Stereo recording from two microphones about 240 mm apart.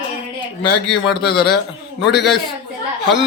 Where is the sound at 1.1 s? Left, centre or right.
Left.